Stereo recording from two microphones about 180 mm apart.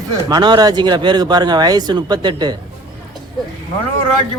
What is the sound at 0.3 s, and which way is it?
Speech, 25° right (ahead or behind).